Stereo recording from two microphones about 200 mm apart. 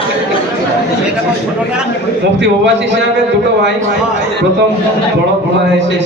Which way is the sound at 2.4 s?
65° right (ahead or behind).